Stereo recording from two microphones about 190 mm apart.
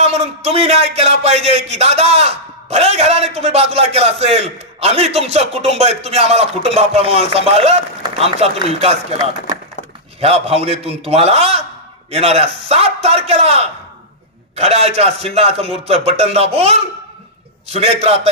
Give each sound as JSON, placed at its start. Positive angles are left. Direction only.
{"t": 0.0, "sound": "a man's voice", "side_deg": -35}
{"t": 10.2, "sound": "a man's voice", "side_deg": -30}